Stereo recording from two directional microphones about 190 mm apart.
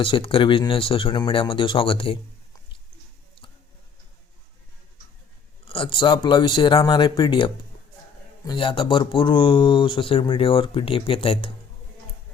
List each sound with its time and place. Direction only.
0.0 s speech: 30° left (ahead or behind)
5.6 s speech: 30° left (ahead or behind)